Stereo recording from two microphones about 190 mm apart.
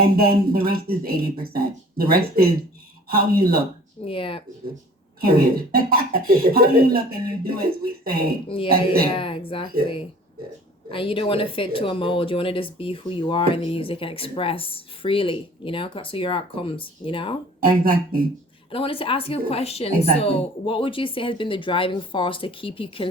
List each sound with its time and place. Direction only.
0.0 s speech: 50° right (ahead or behind)
4.0 s a woman's voice: 30° left (ahead or behind)
5.2 s speech: 50° right (ahead or behind)
8.4 s a woman's voice: 30° left (ahead or behind)
10.9 s a woman's voice: 30° left (ahead or behind)
17.6 s speech: 50° right (ahead or behind)
18.7 s a woman's voice: 30° left (ahead or behind)